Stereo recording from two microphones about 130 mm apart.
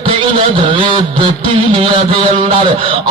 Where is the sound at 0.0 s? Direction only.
45° right (ahead or behind).